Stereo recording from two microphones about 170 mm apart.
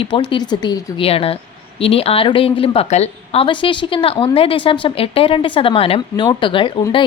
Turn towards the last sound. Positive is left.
turn(degrees=30)  # may be behind; listen again after turning